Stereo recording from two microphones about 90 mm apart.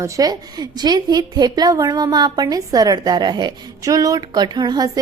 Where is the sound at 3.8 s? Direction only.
40° right (ahead or behind).